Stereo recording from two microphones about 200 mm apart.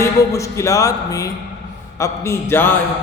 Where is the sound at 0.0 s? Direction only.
15° left (ahead or behind).